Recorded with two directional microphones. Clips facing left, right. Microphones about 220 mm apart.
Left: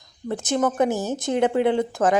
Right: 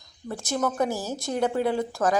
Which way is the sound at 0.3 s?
20° left (ahead or behind).